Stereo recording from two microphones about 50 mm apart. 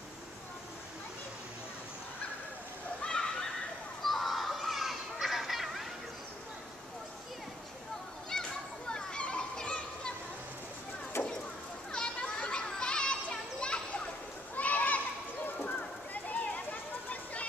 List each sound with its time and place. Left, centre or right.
3.0 s neigh: centre
4.0 s children playing: centre
8.3 s children playing: centre
11.9 s children playing: centre
14.5 s children playing: left
15.4 s bird: left
16.7 s a sound: left